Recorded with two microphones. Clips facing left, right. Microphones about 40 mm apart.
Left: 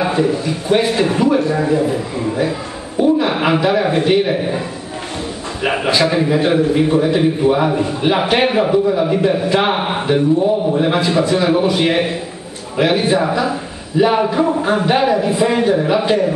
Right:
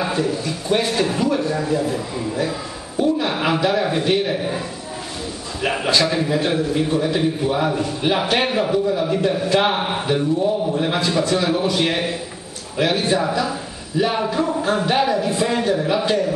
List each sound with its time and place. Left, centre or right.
0.0 s a man's voice: centre